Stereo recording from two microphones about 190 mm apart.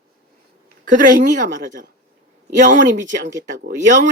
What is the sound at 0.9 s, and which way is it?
Speech, 45° right (ahead or behind).